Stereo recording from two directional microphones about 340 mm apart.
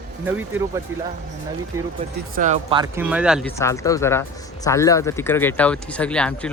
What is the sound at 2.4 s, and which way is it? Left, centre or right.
A man's voice, right.